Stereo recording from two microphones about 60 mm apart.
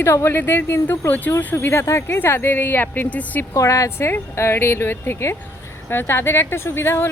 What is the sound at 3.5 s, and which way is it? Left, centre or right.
Speech, left.